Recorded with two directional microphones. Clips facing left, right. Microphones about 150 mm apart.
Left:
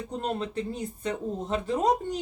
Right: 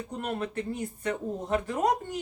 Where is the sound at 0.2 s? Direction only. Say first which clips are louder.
Left 2 dB; 25° left (ahead or behind).